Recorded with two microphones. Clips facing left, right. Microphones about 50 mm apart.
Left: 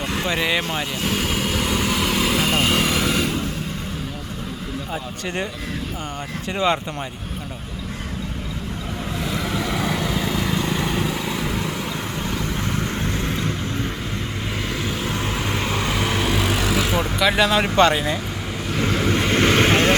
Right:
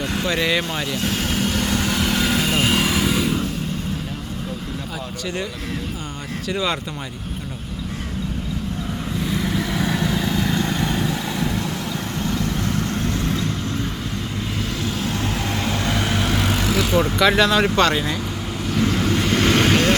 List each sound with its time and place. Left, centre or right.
0.2 s vehicle: centre
6.5 s speech: left
9.2 s vehicle: centre
12.6 s vehicle: left
14.8 s vehicle: centre
17.9 s speech: centre
18.8 s vehicle: centre